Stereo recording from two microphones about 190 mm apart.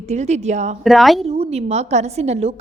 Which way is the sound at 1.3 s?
35° right (ahead or behind).